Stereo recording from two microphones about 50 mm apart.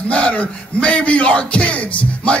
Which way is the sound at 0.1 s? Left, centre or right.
Left.